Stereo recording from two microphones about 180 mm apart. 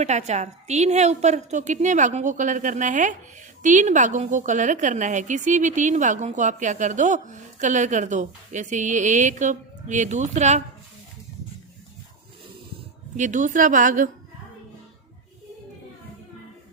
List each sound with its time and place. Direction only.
0.0 s a woman's voice: 40° right (ahead or behind)
13.1 s a woman's voice: 45° right (ahead or behind)